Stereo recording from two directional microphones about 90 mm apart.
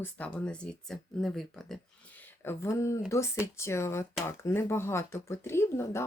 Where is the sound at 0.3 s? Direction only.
10° left (ahead or behind).